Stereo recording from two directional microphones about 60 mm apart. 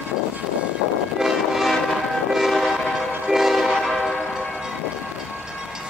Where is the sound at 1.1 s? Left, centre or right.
Centre.